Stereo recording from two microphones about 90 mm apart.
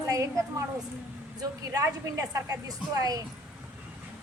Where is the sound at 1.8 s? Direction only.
40° right (ahead or behind).